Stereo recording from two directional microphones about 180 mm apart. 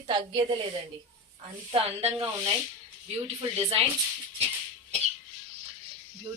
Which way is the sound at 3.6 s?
35° right (ahead or behind).